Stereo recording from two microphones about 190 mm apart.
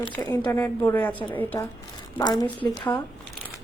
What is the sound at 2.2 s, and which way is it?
Speech, 20° left (ahead or behind).